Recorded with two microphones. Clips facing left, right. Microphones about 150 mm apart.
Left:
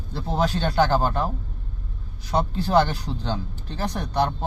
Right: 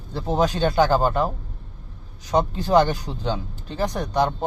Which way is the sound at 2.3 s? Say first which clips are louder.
Right 2 dB; 15° right (ahead or behind).